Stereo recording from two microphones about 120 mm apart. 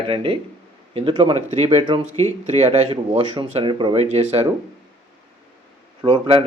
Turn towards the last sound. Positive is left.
turn(degrees=-50)  # may be behind; listen again after turning